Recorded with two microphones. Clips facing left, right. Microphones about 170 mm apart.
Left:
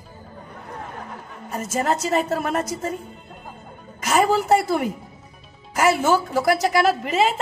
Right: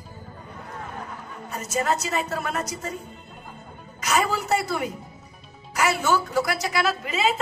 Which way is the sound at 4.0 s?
50° left (ahead or behind).